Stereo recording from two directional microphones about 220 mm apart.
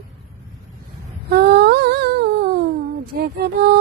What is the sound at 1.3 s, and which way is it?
Humming, 45° right (ahead or behind).